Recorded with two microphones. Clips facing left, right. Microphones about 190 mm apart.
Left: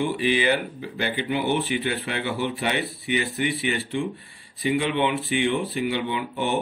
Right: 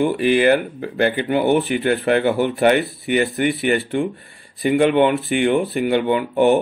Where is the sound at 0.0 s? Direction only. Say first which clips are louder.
Right 7 dB; 50° right (ahead or behind).